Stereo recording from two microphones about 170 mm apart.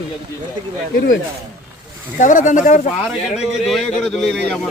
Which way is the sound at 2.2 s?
45° left (ahead or behind).